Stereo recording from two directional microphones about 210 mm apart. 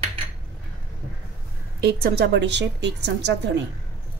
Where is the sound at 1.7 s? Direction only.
50° right (ahead or behind).